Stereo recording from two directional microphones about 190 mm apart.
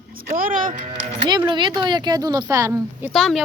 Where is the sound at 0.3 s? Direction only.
45° right (ahead or behind).